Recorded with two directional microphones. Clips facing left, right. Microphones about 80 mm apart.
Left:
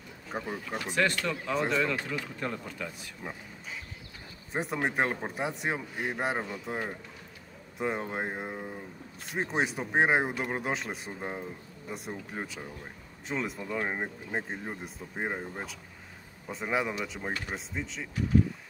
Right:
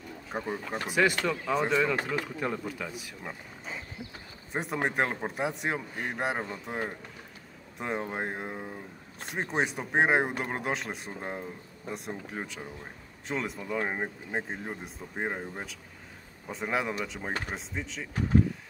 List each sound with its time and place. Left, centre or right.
0.3 s speech: centre
4.5 s speech: centre
7.8 s speech: centre